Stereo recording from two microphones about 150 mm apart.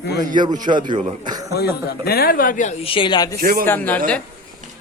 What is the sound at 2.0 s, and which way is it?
Speech, 90° left.